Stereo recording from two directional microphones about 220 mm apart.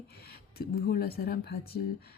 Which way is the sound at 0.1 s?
45° left (ahead or behind).